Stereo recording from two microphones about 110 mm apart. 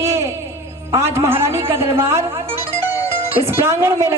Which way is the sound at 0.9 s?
25° right (ahead or behind).